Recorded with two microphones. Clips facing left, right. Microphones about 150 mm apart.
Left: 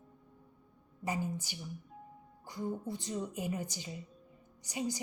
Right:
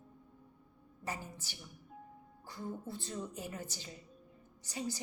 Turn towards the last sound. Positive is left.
turn(degrees=15)  # may be behind; listen again after turning